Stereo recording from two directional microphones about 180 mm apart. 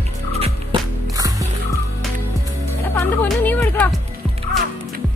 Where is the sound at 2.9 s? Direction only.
10° left (ahead or behind).